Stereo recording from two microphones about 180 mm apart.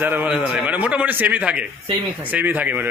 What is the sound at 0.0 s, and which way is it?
Speech, 10° right (ahead or behind).